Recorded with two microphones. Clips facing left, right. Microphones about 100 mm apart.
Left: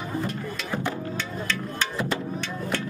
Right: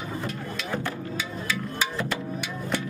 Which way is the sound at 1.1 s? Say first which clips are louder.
Even; 5° right (ahead or behind).